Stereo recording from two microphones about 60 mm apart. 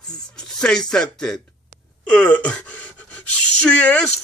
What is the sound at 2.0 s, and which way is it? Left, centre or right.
Speech, left.